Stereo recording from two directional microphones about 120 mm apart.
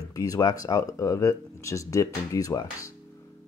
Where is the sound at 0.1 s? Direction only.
30° left (ahead or behind).